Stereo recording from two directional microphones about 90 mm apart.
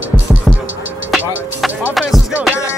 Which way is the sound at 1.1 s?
Centre (ahead or behind).